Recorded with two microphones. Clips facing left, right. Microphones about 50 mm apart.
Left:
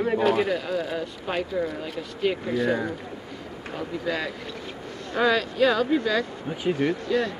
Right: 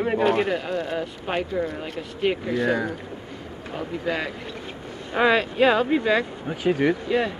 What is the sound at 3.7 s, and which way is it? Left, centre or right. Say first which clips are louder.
Speech: right 2 dB; right.